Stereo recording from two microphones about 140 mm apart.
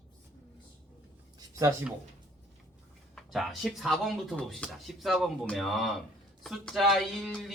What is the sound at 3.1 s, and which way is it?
Speech, centre (ahead or behind).